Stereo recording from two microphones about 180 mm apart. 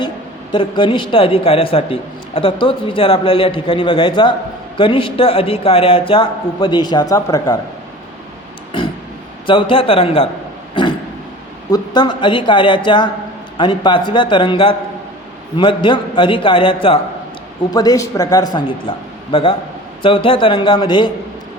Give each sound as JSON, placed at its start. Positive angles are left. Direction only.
{"t": 0.5, "sound": "a man's voice", "side_deg": 25}
{"t": 9.5, "sound": "a man's voice", "side_deg": 30}
{"t": 11.7, "sound": "a man's voice", "side_deg": 25}